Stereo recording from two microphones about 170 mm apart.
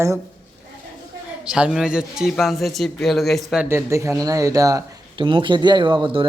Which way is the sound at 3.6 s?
15° right (ahead or behind).